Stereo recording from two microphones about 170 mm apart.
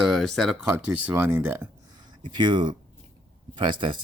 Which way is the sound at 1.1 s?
10° right (ahead or behind).